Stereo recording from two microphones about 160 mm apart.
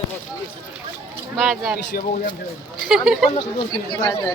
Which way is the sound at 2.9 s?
Centre (ahead or behind).